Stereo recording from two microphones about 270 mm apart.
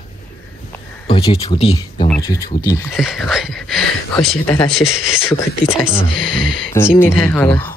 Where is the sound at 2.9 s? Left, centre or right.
Centre.